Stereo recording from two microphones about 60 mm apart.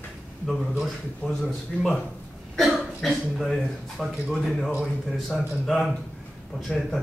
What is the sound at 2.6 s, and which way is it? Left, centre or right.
Speech, centre.